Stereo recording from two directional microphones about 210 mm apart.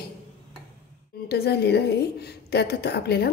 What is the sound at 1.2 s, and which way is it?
A woman's voice, 50° left (ahead or behind).